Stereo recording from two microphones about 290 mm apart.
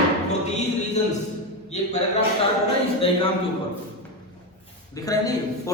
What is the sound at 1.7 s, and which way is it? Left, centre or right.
Speech, left.